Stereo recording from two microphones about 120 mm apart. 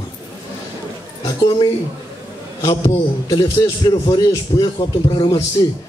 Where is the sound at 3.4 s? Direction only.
40° left (ahead or behind).